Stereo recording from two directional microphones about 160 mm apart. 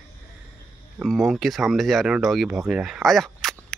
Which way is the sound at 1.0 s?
Centre (ahead or behind).